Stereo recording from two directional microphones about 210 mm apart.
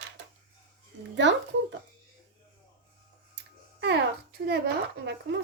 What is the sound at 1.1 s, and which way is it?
Speech, 60° right (ahead or behind).